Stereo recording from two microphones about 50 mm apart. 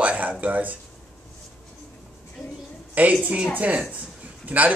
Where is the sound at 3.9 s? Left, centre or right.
Right.